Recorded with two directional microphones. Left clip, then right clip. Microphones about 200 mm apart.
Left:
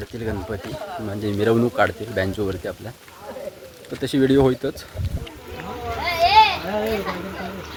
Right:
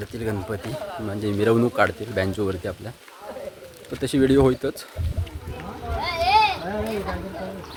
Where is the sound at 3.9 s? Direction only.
5° right (ahead or behind).